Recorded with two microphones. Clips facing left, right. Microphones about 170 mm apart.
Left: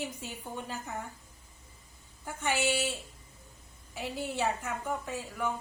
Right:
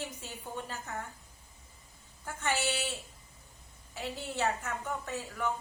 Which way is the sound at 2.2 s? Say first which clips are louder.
Left 1 dB; 15° left (ahead or behind).